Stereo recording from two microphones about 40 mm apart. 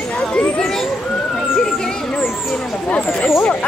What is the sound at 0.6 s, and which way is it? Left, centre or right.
Speech, centre.